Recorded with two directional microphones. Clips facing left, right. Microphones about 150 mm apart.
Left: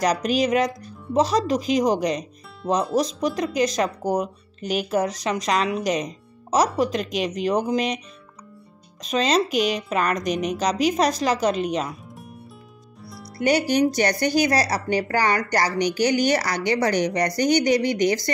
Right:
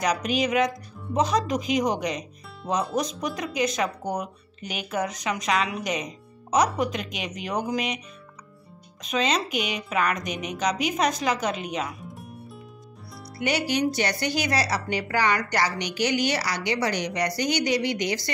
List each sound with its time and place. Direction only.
0.0 s speech: 35° left (ahead or behind)
9.0 s speech: 35° left (ahead or behind)
9.6 s a woman's voice: 5° right (ahead or behind)
9.8 s speech: 35° left (ahead or behind)
10.3 s a woman's voice: 5° right (ahead or behind)
10.6 s speech: 35° left (ahead or behind)
12.0 s music: centre (ahead or behind)
13.4 s speech: 40° left (ahead or behind)